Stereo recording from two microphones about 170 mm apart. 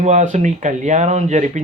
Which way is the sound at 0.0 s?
45° right (ahead or behind).